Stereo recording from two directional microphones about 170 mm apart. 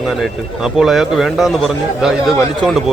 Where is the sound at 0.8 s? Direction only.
Centre (ahead or behind).